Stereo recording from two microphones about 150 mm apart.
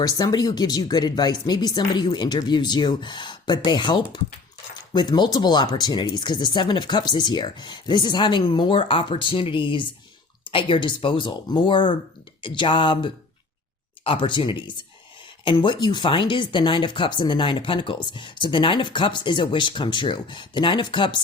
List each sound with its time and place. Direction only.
0.0 s speech: 25° left (ahead or behind)